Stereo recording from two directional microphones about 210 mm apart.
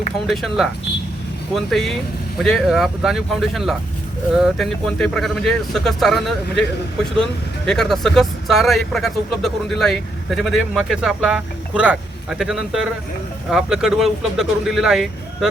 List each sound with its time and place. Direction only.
0.3 s speech: centre (ahead or behind)